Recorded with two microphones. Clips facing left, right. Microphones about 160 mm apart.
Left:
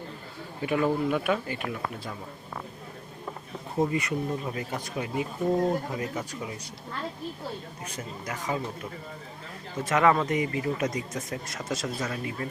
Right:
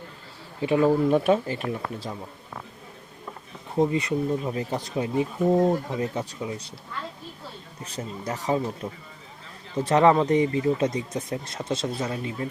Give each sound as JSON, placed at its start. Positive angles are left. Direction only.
{"t": 0.6, "sound": "speech", "side_deg": -30}
{"t": 3.8, "sound": "speech", "side_deg": -25}
{"t": 7.9, "sound": "speech", "side_deg": -35}